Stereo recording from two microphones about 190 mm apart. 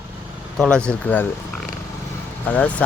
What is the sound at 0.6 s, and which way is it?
Speech, 5° left (ahead or behind).